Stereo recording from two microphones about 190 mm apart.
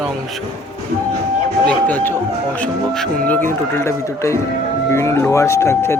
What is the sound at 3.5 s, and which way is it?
Speech, 15° left (ahead or behind).